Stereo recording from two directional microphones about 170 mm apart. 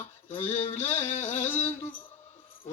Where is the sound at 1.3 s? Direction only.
10° left (ahead or behind).